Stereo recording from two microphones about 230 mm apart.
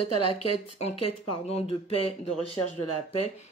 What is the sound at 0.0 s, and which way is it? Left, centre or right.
Speech, left.